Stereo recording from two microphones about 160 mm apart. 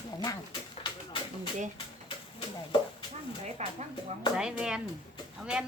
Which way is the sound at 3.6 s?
45° right (ahead or behind).